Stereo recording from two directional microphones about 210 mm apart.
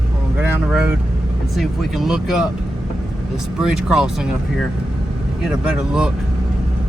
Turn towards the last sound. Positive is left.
turn(degrees=-5)  # may be behind; listen again after turning